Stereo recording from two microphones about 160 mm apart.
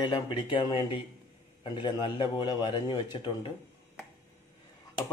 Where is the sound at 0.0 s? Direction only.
30° left (ahead or behind).